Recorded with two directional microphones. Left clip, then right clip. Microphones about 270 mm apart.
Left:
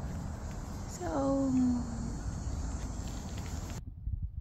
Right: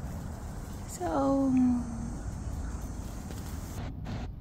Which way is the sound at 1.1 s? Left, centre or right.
Centre.